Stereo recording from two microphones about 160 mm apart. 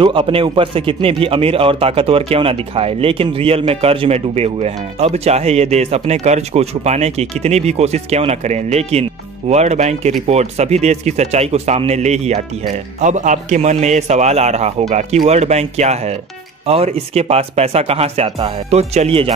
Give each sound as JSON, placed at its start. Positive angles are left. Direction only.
{"t": 0.0, "sound": "a man's voice", "side_deg": -35}